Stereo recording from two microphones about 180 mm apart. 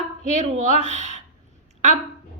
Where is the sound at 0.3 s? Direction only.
40° right (ahead or behind).